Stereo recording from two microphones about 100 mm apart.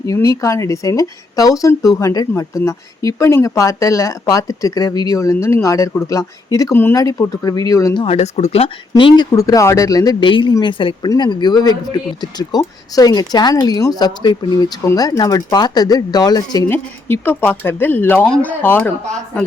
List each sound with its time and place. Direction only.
0.0 s speech: 35° left (ahead or behind)
8.0 s speech: 90° left
9.0 s speech: 55° left (ahead or behind)
9.3 s speech: 30° left (ahead or behind)
10.2 s speech: 55° left (ahead or behind)
16.6 s speech: 20° left (ahead or behind)